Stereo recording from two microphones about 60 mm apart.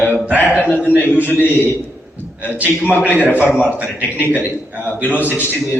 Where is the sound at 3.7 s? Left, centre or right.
Right.